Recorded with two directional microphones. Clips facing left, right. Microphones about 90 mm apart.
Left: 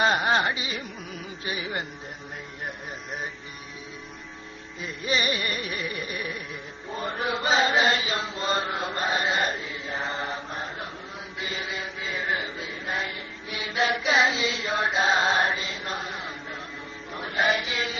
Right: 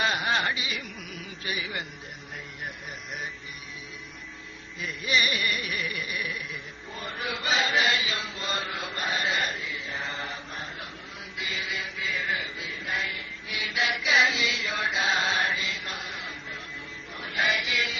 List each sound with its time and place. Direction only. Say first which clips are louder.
0.0 s carnatic music: left 4 dB; 35° left (ahead or behind)
4.8 s carnatic music: even; 30° left (ahead or behind)
6.9 s chant: left 6 dB; 35° left (ahead or behind)